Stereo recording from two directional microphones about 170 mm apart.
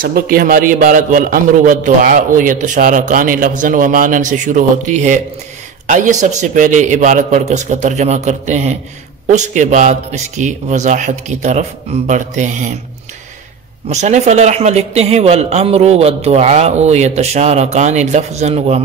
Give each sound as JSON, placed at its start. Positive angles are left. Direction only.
{"t": 0.0, "sound": "a man's voice", "side_deg": -60}
{"t": 13.8, "sound": "a man's voice", "side_deg": -45}